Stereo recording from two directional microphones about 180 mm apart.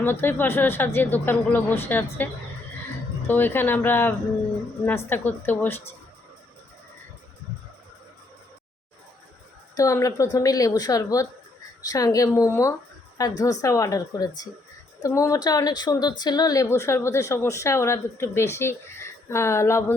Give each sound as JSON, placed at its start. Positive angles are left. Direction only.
{"t": 0.0, "sound": "speech", "side_deg": 10}
{"t": 9.7, "sound": "speech", "side_deg": 20}